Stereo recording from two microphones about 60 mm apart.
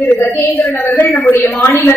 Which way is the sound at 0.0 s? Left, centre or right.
Left.